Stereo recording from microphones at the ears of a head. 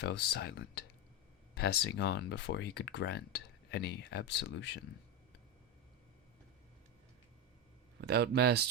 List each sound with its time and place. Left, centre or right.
0.0 s speech: left
7.9 s speech: right